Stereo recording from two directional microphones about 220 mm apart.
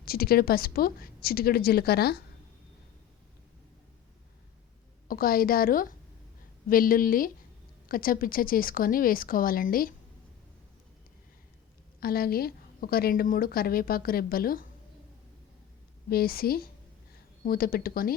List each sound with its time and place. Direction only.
0.0 s a woman's voice: 45° left (ahead or behind)
5.0 s a woman's voice: 40° left (ahead or behind)
11.9 s a woman's voice: 45° left (ahead or behind)
16.0 s a woman's voice: 45° left (ahead or behind)